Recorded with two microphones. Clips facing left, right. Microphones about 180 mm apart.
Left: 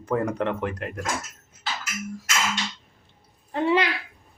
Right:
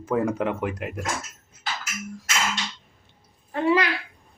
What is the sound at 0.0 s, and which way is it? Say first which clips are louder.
Speech: right 1 dB; 5° right (ahead or behind).